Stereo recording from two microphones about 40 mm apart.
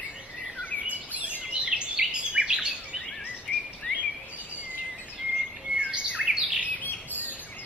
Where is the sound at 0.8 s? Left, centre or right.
Right.